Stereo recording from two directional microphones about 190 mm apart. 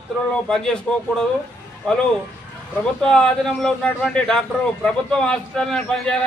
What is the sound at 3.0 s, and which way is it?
A man's voice, 5° left (ahead or behind).